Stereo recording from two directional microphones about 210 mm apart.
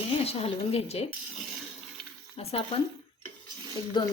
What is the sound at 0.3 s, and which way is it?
Speech, 30° left (ahead or behind).